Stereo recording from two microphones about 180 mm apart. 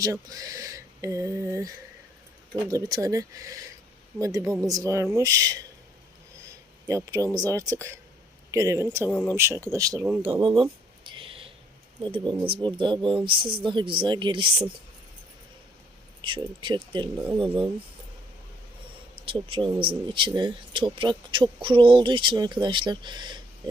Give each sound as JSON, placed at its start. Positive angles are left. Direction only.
{"t": 0.0, "sound": "speech", "side_deg": -20}
{"t": 9.0, "sound": "speech", "side_deg": 10}
{"t": 9.3, "sound": "speech", "side_deg": -15}
{"t": 10.4, "sound": "a sound", "side_deg": -30}
{"t": 11.9, "sound": "speech", "side_deg": -25}
{"t": 16.2, "sound": "speech", "side_deg": -25}
{"t": 19.3, "sound": "speech", "side_deg": -30}